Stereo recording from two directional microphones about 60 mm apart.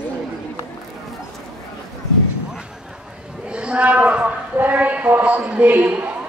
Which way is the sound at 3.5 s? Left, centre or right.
Right.